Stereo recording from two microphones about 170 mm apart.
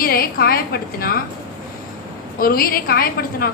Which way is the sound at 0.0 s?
60° left (ahead or behind).